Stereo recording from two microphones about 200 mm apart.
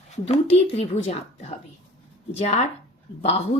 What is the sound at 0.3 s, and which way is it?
Speech, 30° left (ahead or behind).